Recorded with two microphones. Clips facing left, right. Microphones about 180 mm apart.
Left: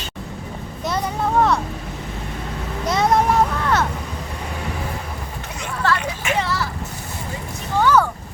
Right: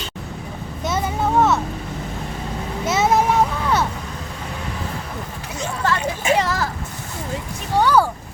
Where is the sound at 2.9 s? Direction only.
5° right (ahead or behind).